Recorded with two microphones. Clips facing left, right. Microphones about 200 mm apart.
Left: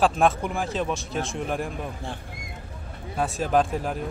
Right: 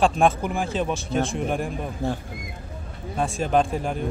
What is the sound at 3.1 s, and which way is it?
Speech, 5° left (ahead or behind).